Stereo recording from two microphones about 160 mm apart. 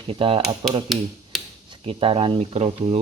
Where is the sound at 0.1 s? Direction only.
35° right (ahead or behind).